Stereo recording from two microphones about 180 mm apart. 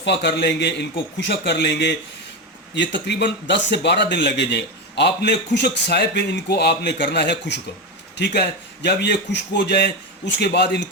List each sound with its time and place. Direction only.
0.0 s speech: 75° left (ahead or behind)